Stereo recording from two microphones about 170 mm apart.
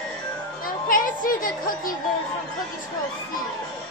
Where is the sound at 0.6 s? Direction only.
55° left (ahead or behind).